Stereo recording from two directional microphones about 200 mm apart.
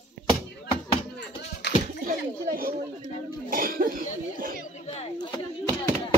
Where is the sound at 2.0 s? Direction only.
45° right (ahead or behind).